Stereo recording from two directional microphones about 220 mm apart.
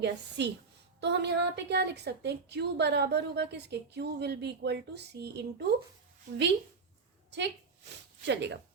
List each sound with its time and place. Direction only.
0.0 s a woman's voice: 50° right (ahead or behind)
7.3 s a woman's voice: 50° right (ahead or behind)